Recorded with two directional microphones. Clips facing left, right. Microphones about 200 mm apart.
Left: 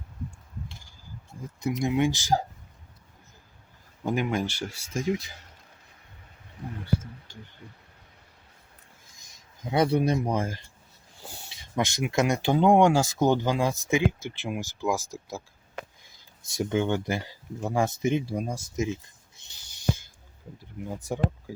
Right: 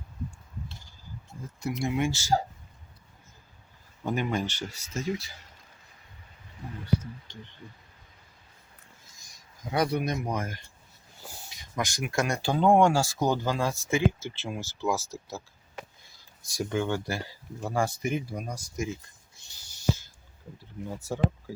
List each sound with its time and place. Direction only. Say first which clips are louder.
1.8 s speech: left 3 dB; 15° left (ahead or behind)
4.0 s speech: left 2 dB; 10° left (ahead or behind)
9.3 s speech: left 3 dB; 25° left (ahead or behind)
20.9 s speech: even; 15° left (ahead or behind)